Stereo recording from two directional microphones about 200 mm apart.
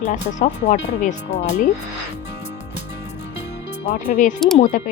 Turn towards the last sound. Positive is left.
turn(degrees=35)  # may be behind; listen again after turning